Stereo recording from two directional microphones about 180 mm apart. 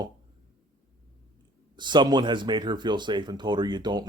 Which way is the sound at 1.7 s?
25° right (ahead or behind).